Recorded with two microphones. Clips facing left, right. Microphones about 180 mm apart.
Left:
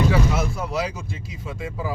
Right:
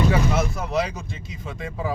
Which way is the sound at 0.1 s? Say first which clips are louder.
Even; 5° left (ahead or behind).